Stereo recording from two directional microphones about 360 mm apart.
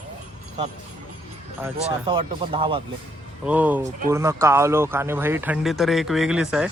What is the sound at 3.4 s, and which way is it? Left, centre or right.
Speech, centre.